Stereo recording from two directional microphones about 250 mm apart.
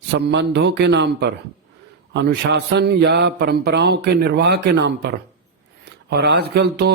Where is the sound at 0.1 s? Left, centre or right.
Right.